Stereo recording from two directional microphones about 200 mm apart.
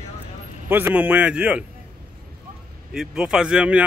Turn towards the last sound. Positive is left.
turn(degrees=-5)  # may be behind; listen again after turning